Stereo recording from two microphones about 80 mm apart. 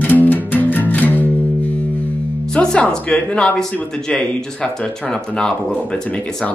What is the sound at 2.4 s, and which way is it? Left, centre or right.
Speech, centre.